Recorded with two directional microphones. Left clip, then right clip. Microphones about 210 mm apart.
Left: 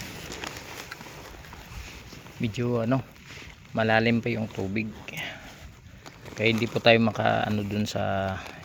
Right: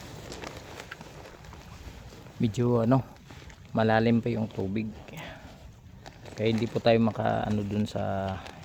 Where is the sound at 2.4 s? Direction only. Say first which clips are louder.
Right 2 dB; 25° right (ahead or behind).